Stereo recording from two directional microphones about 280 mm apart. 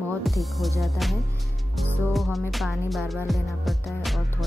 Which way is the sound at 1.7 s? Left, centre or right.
Centre.